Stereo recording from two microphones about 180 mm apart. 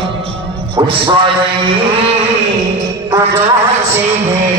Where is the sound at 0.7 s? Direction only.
25° right (ahead or behind).